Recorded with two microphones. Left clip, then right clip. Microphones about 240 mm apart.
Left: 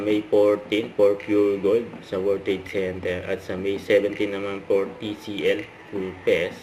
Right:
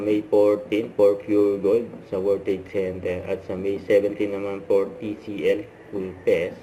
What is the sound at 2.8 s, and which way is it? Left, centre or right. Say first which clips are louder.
Speech: even; left.